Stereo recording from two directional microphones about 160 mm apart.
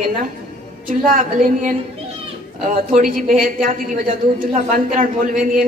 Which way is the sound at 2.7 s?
60° right (ahead or behind).